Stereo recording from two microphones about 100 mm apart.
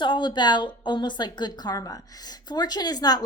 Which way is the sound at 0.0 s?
50° left (ahead or behind).